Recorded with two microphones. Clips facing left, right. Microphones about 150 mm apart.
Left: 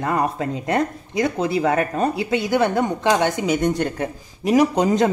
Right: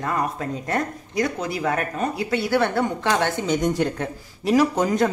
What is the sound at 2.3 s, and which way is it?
A woman's voice, 20° left (ahead or behind).